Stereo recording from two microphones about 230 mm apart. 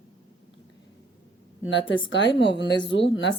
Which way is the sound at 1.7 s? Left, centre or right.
Left.